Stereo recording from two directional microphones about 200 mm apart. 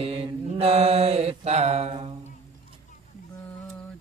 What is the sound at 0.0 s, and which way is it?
Mantra, 30° right (ahead or behind).